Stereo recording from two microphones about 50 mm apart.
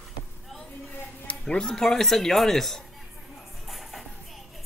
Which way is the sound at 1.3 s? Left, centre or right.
Centre.